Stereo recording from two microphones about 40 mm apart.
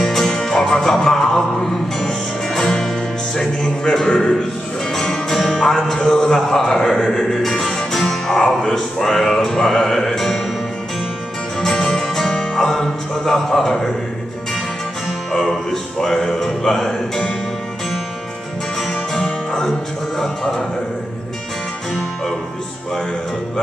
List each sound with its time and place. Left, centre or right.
0.0 s music: centre
11.6 s music: centre
15.3 s music: centre
19.2 s music: centre